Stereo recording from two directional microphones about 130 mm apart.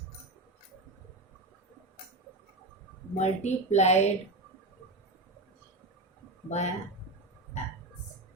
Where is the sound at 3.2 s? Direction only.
60° left (ahead or behind).